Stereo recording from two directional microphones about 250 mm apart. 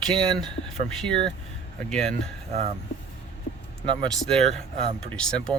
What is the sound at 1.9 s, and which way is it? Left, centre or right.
Speech, centre.